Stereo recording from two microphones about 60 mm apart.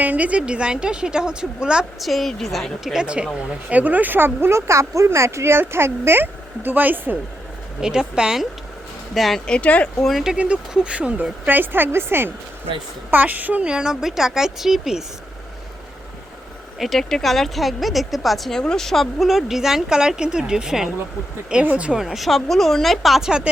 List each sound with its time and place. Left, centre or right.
0.0 s speech: right
2.0 s speech: centre
3.3 s speech: right
7.8 s speech: centre
9.5 s speech: left
10.0 s speech: centre
10.3 s speech: right
11.4 s speech: right
13.1 s speech: right; by 15.0 s centre
16.7 s speech: centre
21.5 s speech: right
21.9 s speech: centre